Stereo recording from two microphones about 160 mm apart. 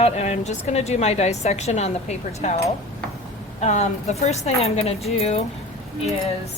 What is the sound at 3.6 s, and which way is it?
A woman's voice, 45° left (ahead or behind).